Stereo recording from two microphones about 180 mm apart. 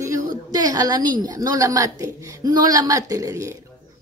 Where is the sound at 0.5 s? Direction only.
20° right (ahead or behind).